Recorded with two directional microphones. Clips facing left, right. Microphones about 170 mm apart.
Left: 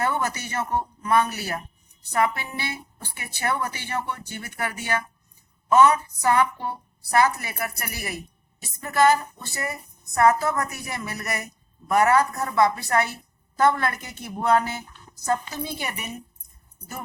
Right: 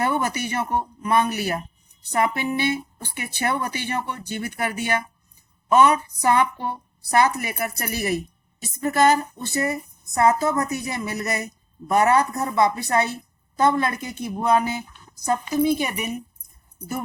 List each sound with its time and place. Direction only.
0.0 s a woman's voice: 15° right (ahead or behind)